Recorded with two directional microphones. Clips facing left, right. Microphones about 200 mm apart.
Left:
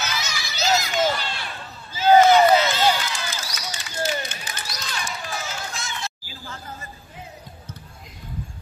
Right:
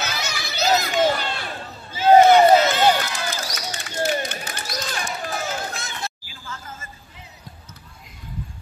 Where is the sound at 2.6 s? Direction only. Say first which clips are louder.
Right 3 dB; 55° right (ahead or behind).